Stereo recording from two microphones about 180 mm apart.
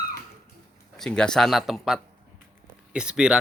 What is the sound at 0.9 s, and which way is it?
Speech, 5° left (ahead or behind).